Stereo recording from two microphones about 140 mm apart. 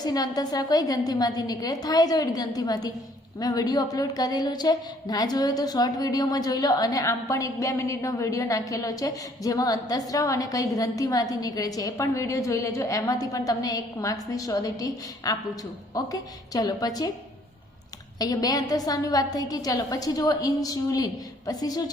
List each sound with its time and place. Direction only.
0.0 s a woman's voice: 30° left (ahead or behind)
18.2 s a woman's voice: 25° left (ahead or behind)